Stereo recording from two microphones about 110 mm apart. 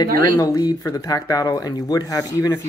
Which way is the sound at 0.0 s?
35° left (ahead or behind).